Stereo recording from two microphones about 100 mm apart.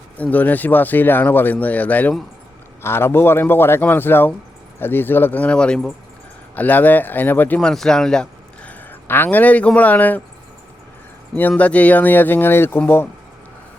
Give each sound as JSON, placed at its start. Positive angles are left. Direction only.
{"t": 0.2, "sound": "speech", "side_deg": 15}
{"t": 7.6, "sound": "speech", "side_deg": 5}
{"t": 11.3, "sound": "speech", "side_deg": 15}